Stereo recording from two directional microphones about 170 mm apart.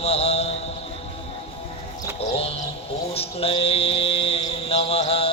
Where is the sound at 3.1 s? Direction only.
35° left (ahead or behind).